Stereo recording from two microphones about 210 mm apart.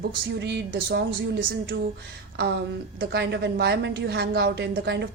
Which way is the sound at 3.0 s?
55° right (ahead or behind).